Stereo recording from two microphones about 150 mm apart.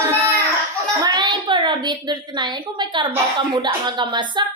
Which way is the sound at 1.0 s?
30° right (ahead or behind).